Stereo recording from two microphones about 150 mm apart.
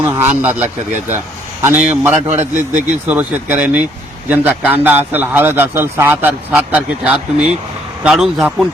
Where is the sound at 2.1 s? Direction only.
50° right (ahead or behind).